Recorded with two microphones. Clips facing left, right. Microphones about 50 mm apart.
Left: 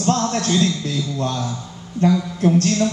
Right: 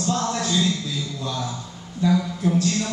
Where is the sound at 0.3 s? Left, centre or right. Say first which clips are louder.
Left 3 dB; left.